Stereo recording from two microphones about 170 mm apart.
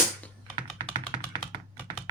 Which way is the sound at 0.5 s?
30° right (ahead or behind).